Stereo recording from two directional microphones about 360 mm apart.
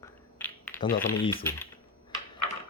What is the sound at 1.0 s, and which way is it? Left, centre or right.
Speech, centre.